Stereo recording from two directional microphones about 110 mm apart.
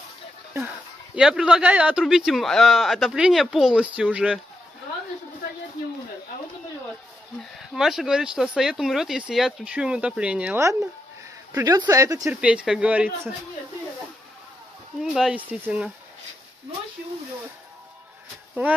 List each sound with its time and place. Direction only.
1.1 s speech: 5° right (ahead or behind)
7.7 s speech: 5° right (ahead or behind)
10.6 s speech: 25° right (ahead or behind)
12.3 s speech: 10° right (ahead or behind)
15.0 s speech: 5° right (ahead or behind)
18.5 s speech: 15° right (ahead or behind)